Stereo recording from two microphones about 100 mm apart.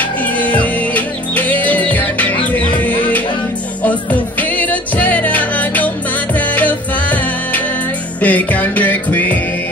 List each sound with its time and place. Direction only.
0.4 s music: 15° left (ahead or behind)